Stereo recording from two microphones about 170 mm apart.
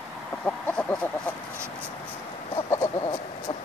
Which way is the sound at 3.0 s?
25° left (ahead or behind).